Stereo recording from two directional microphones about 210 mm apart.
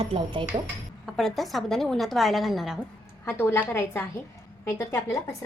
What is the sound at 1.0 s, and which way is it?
A woman's voice, centre (ahead or behind).